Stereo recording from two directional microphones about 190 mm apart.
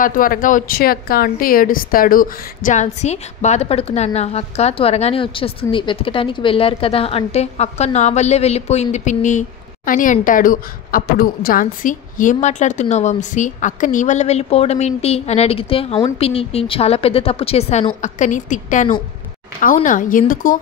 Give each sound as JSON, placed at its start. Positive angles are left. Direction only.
{"t": 0.0, "sound": "a woman's voice", "side_deg": 45}